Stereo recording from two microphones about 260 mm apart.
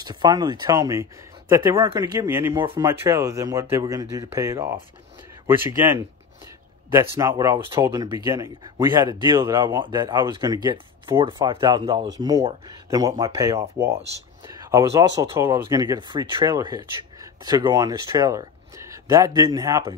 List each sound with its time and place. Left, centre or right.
0.0 s speech: centre
5.7 s a sound: centre
7.0 s speech: centre